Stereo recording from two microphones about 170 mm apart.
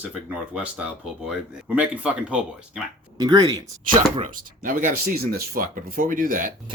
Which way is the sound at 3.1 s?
25° right (ahead or behind).